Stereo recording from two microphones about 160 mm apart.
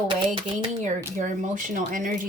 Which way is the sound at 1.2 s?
50° right (ahead or behind).